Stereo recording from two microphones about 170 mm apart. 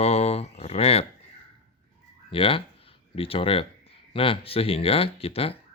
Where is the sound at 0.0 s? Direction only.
40° left (ahead or behind).